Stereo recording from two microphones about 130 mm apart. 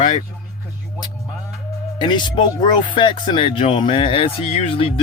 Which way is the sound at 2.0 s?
35° left (ahead or behind).